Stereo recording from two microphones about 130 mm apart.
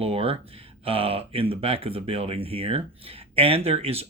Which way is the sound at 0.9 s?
45° right (ahead or behind).